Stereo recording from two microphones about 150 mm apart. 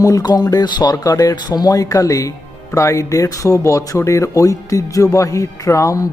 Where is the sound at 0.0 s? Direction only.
25° left (ahead or behind).